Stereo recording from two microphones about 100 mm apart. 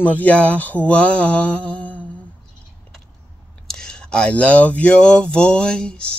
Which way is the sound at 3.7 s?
5° left (ahead or behind).